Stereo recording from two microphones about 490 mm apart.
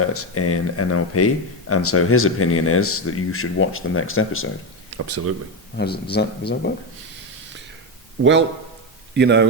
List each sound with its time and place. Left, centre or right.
0.0 s speech: left
4.9 s speech: right
5.7 s speech: centre
8.2 s speech: right